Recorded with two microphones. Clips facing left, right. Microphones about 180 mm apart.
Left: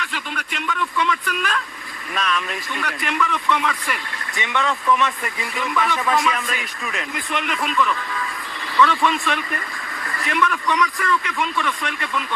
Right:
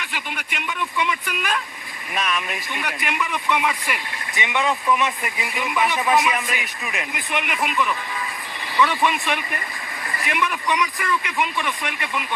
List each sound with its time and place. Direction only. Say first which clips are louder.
0.1 s speech: left 2 dB; 15° right (ahead or behind)